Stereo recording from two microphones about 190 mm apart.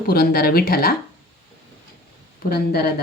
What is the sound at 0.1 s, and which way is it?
Speech, 55° left (ahead or behind).